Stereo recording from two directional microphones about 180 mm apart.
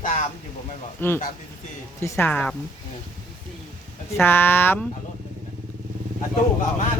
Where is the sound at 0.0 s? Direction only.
45° left (ahead or behind).